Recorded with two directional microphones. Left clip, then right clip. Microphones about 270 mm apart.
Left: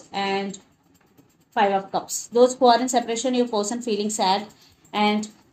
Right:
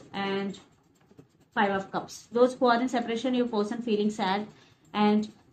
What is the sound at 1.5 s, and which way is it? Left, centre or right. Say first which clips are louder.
Speech: left 6 dB; left.